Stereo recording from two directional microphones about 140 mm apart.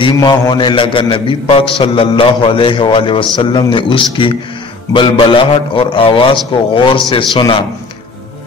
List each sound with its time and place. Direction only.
0.0 s a man's voice: 35° left (ahead or behind)